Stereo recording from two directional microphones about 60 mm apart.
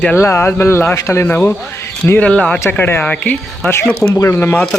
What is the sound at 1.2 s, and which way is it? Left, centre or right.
Speech, left.